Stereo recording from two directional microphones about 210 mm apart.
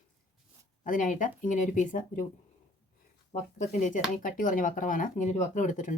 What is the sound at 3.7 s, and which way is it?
Speech, 40° left (ahead or behind).